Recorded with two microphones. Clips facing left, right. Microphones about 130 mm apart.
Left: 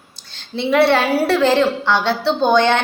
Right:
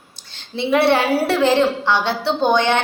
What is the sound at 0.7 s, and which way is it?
A woman's voice, 20° right (ahead or behind).